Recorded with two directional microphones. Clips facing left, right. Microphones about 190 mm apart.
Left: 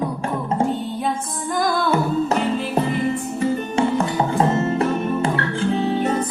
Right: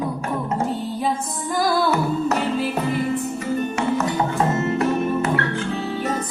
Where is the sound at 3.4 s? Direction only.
30° left (ahead or behind).